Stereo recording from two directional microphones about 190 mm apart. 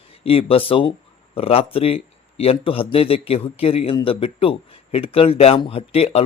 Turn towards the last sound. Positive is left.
turn(degrees=30)  # may be behind; listen again after turning